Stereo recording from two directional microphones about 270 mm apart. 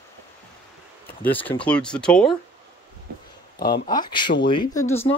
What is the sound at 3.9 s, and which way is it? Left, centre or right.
Speech, centre.